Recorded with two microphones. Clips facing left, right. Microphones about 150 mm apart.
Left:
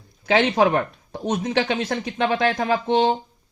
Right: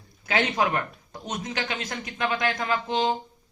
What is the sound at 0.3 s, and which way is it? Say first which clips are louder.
Speech: left 7 dB; 90° left.